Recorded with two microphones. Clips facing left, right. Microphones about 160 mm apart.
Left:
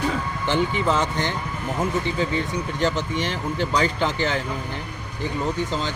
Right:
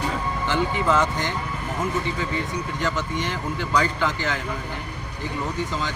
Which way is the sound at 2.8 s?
25° left (ahead or behind).